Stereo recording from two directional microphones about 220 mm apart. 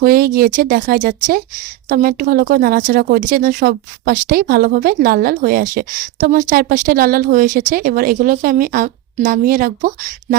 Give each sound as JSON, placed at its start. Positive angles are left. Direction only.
{"t": 0.0, "sound": "speech", "side_deg": -40}